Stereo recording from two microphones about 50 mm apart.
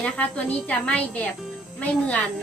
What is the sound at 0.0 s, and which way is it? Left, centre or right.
A woman's voice, left.